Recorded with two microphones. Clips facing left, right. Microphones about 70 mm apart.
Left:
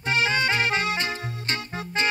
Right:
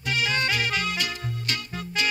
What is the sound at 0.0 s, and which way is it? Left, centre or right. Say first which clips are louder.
Music: left 3 dB; left.